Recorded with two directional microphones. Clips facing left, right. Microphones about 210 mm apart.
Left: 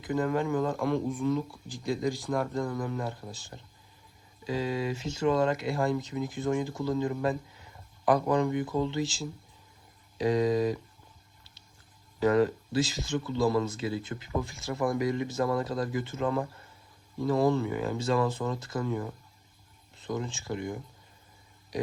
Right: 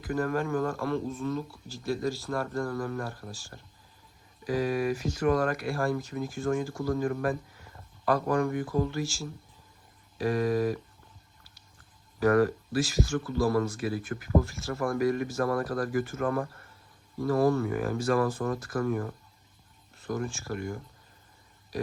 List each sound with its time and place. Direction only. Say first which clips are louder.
0.0 s speech: left 1 dB; 20° left (ahead or behind)
12.2 s speech: right 1 dB; 20° left (ahead or behind)